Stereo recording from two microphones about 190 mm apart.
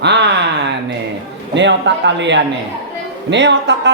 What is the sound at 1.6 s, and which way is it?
A man's voice, 65° right (ahead or behind).